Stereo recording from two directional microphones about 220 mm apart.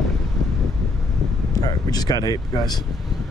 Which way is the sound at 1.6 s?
15° left (ahead or behind).